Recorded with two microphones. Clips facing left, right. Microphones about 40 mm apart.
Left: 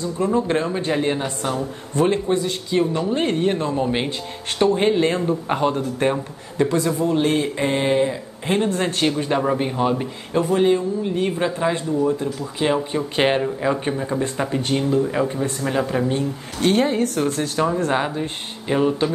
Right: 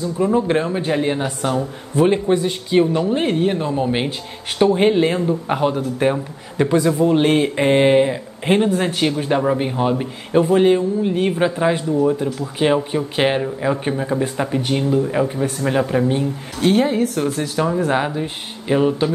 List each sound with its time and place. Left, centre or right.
0.2 s a man's voice: centre
3.1 s speech: centre
5.1 s speech: centre
6.6 s a man's voice: right
8.5 s speech: centre
10.3 s a man's voice: right
12.9 s speech: centre
16.6 s speech: centre